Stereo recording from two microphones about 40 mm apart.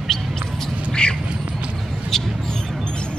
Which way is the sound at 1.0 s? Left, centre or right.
Left.